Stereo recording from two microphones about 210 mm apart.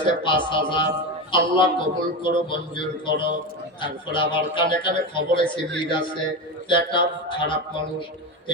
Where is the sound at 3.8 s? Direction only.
25° left (ahead or behind).